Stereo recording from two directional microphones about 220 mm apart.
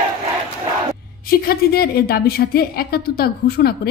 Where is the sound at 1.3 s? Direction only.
45° left (ahead or behind).